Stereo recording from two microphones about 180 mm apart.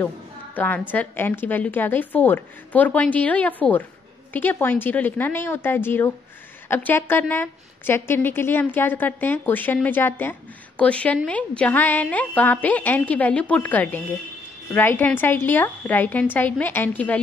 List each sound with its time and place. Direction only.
0.6 s a woman's voice: 10° left (ahead or behind)